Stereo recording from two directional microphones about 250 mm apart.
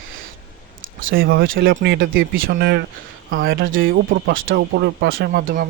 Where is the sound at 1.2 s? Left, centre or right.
Right.